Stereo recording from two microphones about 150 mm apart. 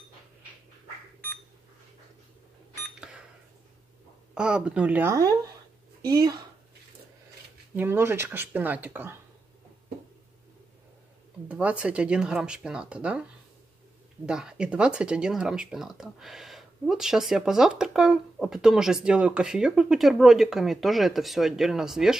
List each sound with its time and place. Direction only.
4.3 s speech: 5° right (ahead or behind)
5.1 s speech: 25° right (ahead or behind)
7.7 s speech: 15° right (ahead or behind)
11.4 s speech: 10° right (ahead or behind)
14.2 s speech: 5° right (ahead or behind)